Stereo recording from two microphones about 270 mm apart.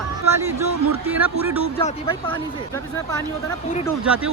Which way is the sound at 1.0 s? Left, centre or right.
Centre.